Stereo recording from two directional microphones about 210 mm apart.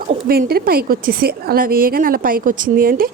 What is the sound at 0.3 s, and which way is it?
A woman's voice, 45° right (ahead or behind).